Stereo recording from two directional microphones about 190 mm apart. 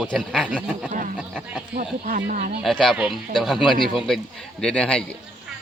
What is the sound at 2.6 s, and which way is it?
Speech, centre (ahead or behind).